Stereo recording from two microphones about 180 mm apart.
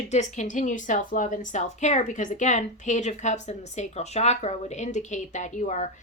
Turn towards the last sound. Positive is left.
turn(degrees=40)  # may be behind; listen again after turning